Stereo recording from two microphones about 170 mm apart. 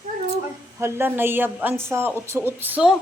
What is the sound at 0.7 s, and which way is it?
A woman's voice, 15° right (ahead or behind).